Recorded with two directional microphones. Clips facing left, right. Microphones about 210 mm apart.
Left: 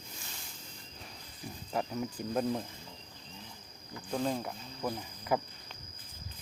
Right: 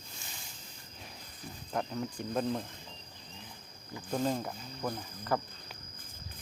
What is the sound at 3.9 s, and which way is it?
Speech, 5° right (ahead or behind).